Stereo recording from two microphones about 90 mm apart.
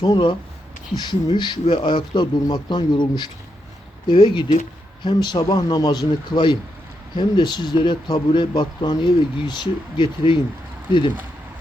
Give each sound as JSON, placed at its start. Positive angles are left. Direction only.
{"t": 0.0, "sound": "speech", "side_deg": 55}
{"t": 5.4, "sound": "speech", "side_deg": 45}